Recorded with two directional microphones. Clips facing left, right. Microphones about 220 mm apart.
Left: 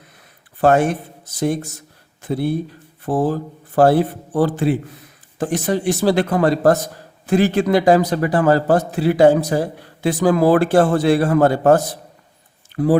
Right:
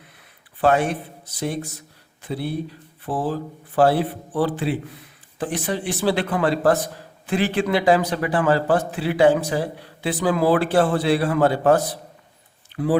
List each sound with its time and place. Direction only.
0.6 s a man's voice: 45° left (ahead or behind)